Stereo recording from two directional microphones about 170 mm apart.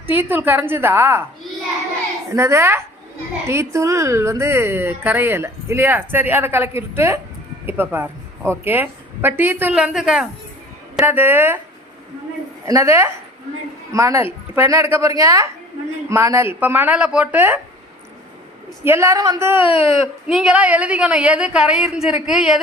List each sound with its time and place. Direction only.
0.1 s a woman's voice: 10° right (ahead or behind)
2.3 s a woman's voice: 15° right (ahead or behind)
12.6 s a woman's voice: 20° right (ahead or behind)
18.9 s a woman's voice: 15° right (ahead or behind)
19.6 s speech: 35° left (ahead or behind)
20.2 s a woman's voice: 5° right (ahead or behind)